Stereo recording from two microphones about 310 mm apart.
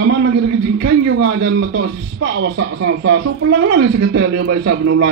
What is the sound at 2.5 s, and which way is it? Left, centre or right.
Speech, right.